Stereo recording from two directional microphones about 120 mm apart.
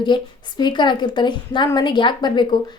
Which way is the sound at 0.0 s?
40° left (ahead or behind).